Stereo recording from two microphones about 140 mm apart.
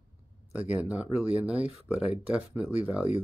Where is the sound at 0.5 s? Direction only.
10° right (ahead or behind).